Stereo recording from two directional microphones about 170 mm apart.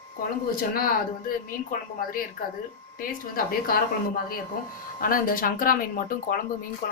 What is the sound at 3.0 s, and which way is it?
A woman's voice, 55° left (ahead or behind).